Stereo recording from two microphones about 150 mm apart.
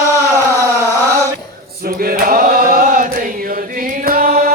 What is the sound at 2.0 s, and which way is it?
Chant, 70° right (ahead or behind).